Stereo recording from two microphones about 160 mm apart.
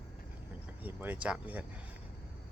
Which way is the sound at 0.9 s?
10° right (ahead or behind).